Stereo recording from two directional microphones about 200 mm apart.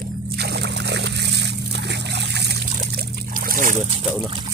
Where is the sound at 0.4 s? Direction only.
55° right (ahead or behind).